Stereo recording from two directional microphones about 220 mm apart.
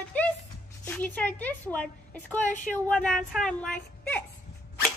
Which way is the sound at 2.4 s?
35° left (ahead or behind).